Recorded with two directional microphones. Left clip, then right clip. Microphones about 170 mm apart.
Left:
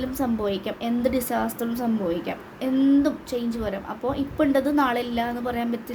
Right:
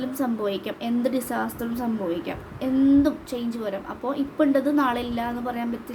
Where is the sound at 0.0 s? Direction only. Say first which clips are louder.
Even; 10° left (ahead or behind).